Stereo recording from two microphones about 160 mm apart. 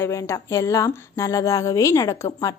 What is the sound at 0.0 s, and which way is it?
A woman's voice, 15° left (ahead or behind).